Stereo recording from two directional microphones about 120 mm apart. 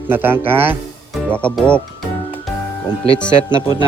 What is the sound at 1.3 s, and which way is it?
Speech, 10° left (ahead or behind).